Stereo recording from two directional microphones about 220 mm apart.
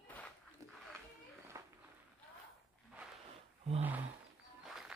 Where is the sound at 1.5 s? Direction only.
15° right (ahead or behind).